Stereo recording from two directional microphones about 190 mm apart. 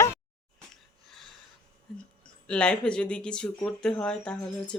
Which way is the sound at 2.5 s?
5° left (ahead or behind).